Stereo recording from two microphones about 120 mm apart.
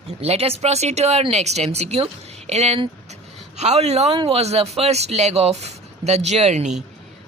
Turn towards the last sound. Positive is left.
turn(degrees=-65)  # may be behind; listen again after turning